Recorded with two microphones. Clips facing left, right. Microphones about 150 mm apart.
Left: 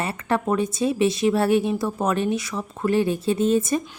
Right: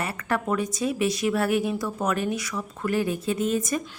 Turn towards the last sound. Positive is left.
turn(degrees=30)  # may be behind; listen again after turning